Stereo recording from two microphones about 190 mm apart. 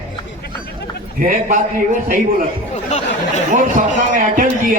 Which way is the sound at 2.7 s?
35° left (ahead or behind).